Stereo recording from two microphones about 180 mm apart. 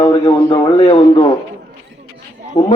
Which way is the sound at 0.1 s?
20° left (ahead or behind).